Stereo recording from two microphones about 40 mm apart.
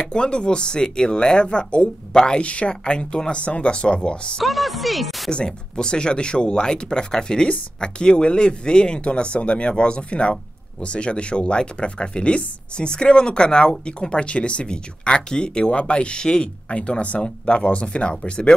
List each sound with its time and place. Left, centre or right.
0.0 s speech: left
2.4 s speech: left
2.7 s speech: left
4.4 s a sound: centre
5.3 s speech: left